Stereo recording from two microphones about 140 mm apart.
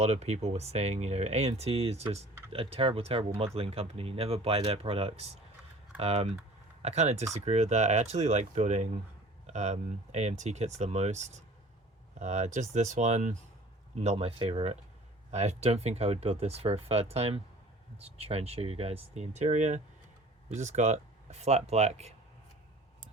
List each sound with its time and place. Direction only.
0.0 s speech: 50° right (ahead or behind)